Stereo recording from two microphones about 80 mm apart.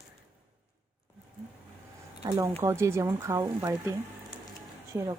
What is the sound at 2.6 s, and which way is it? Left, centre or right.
Speech, right.